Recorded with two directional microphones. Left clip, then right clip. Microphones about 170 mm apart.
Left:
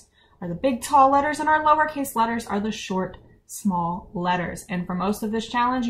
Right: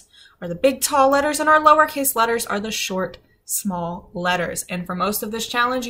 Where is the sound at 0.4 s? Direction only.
10° right (ahead or behind).